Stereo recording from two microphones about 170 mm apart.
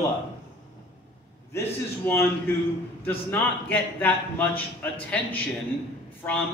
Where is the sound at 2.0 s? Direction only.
10° left (ahead or behind).